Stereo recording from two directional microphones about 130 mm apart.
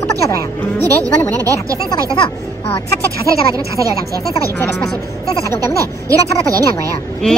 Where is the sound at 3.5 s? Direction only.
25° right (ahead or behind).